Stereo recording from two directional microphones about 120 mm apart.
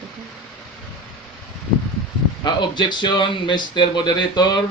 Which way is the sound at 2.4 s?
40° left (ahead or behind).